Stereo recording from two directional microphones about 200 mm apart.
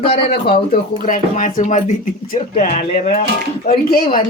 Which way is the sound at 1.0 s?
40° left (ahead or behind).